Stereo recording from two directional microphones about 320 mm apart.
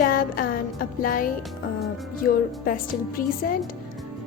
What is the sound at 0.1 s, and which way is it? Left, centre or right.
Music, left.